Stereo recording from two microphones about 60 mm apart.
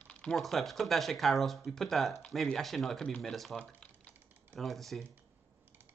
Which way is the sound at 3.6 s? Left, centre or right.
Centre.